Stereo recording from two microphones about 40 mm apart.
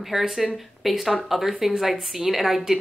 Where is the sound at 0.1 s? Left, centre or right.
Centre.